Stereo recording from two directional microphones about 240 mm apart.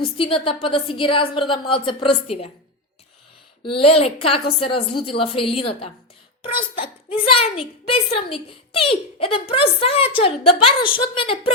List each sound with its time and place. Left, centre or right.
0.2 s a woman's voice: left
3.6 s a woman's voice: left